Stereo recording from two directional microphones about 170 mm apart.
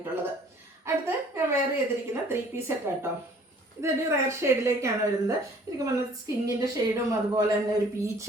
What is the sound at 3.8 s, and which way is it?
A woman's voice, 15° right (ahead or behind).